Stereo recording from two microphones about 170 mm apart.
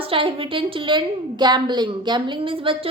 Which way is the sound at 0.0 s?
30° right (ahead or behind).